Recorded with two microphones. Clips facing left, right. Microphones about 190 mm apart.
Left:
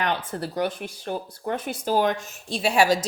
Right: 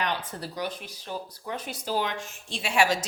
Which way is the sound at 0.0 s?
55° left (ahead or behind).